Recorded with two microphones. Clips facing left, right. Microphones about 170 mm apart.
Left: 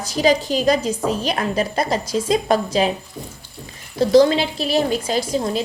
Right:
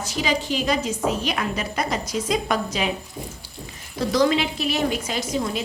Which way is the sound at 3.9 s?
30° left (ahead or behind).